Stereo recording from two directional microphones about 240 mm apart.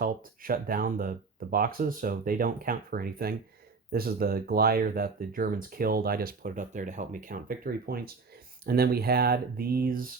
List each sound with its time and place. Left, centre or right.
0.0 s speech: right